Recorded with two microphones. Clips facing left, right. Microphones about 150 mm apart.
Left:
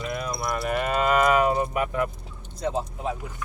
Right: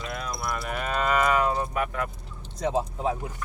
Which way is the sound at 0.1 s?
10° left (ahead or behind).